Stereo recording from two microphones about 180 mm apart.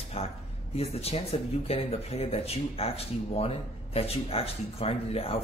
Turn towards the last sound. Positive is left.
turn(degrees=35)  # may be behind; listen again after turning